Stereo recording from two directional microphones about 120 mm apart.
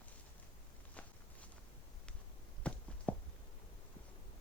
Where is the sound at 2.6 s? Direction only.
10° left (ahead or behind).